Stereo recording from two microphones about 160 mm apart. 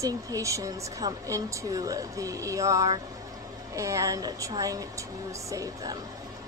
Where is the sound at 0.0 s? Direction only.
20° right (ahead or behind).